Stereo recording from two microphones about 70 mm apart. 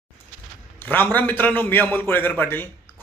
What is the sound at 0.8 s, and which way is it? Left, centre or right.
Speech, left.